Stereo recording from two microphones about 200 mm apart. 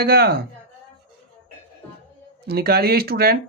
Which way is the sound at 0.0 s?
50° right (ahead or behind).